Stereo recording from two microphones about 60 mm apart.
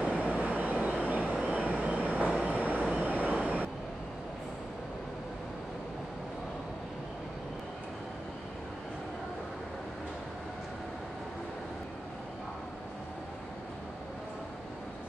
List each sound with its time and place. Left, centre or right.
0.0 s train: right
1.4 s vehicle: right